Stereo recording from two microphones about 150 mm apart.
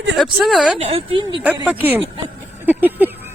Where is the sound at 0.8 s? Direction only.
40° right (ahead or behind).